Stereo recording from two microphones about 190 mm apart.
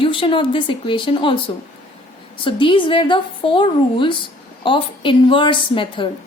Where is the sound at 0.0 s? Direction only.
25° left (ahead or behind).